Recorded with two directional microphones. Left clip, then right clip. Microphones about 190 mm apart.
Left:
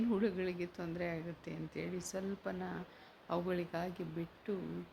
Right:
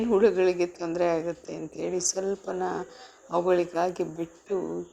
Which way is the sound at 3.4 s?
Centre (ahead or behind).